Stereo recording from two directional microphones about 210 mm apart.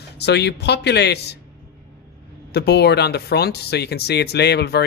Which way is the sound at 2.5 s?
50° left (ahead or behind).